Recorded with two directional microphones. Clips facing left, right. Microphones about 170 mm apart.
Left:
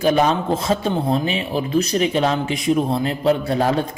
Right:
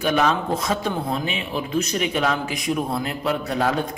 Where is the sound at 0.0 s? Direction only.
35° left (ahead or behind).